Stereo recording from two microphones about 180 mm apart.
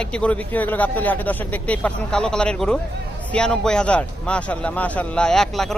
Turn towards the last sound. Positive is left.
turn(degrees=0)  # may be behind; listen again after turning